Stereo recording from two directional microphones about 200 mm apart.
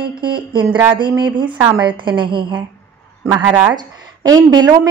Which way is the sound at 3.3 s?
10° right (ahead or behind).